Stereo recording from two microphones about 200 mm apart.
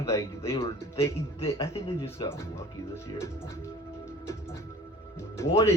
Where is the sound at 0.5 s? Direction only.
30° left (ahead or behind).